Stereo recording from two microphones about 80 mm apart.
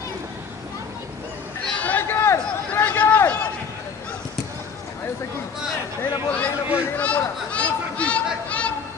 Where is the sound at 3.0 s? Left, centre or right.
Left.